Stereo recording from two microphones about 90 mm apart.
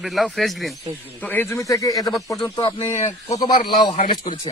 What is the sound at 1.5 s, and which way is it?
Speech, 40° left (ahead or behind).